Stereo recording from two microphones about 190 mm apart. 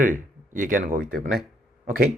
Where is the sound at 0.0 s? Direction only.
45° right (ahead or behind).